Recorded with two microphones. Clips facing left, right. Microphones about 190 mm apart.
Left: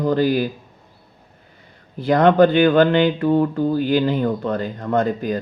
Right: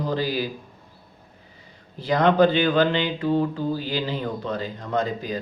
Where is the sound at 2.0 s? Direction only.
55° left (ahead or behind).